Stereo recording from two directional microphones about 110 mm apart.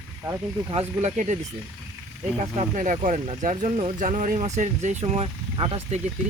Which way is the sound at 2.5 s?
80° right.